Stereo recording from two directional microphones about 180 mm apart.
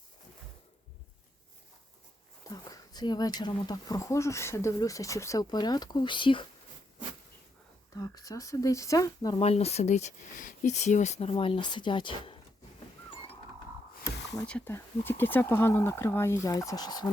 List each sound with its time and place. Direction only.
2.5 s speech: 20° left (ahead or behind)
7.9 s speech: 20° left (ahead or behind)
9.4 s speech: 35° left (ahead or behind)
14.4 s speech: 10° left (ahead or behind)